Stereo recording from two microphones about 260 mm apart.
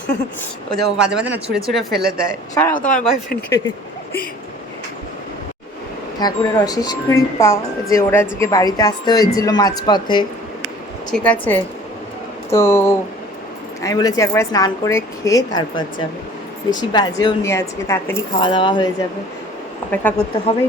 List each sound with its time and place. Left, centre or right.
0.8 s speech: centre
2.7 s speech: left
6.1 s speech: centre
11.1 s speech: centre
20.5 s speech: left